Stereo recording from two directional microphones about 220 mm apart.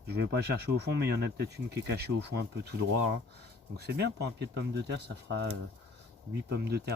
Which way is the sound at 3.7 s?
50° right (ahead or behind).